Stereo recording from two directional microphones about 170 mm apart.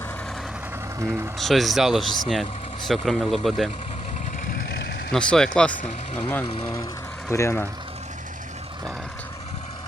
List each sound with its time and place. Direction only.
1.4 s speech: centre (ahead or behind)
5.1 s speech: 5° left (ahead or behind)